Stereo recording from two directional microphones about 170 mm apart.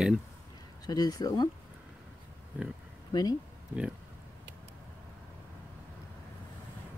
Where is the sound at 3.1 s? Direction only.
20° left (ahead or behind).